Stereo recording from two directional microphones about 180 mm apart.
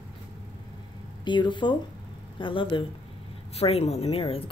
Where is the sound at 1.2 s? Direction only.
25° left (ahead or behind).